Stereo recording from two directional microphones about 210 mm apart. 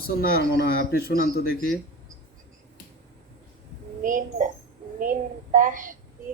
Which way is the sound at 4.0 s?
40° right (ahead or behind).